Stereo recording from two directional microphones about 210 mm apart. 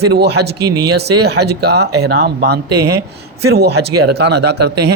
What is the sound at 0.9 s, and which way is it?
A man's voice, 50° right (ahead or behind).